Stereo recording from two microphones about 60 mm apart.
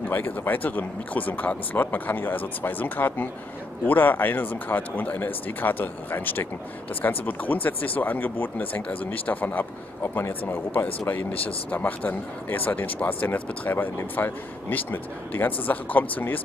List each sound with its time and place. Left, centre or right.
0.1 s a man's voice: left
10.0 s a man's voice: left